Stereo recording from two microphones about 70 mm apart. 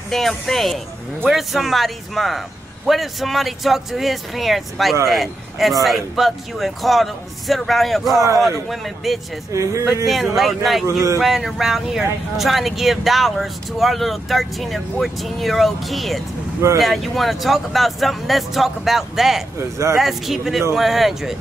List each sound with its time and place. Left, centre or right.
0.1 s speech: centre
9.5 s speech: right
10.0 s speech: centre